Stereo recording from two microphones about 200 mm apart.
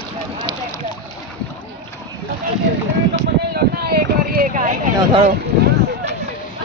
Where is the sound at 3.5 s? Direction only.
50° right (ahead or behind).